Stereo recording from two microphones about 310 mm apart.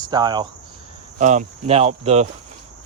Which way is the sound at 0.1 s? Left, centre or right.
Centre.